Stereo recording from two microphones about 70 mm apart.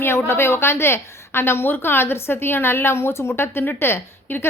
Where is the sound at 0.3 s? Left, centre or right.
Left.